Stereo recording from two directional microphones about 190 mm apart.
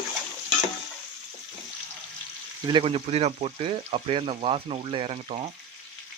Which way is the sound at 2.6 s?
25° right (ahead or behind).